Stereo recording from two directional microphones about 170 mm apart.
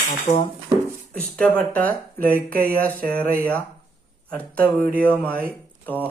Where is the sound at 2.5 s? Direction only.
60° right (ahead or behind).